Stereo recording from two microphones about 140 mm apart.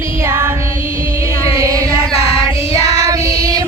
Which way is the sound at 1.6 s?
25° right (ahead or behind).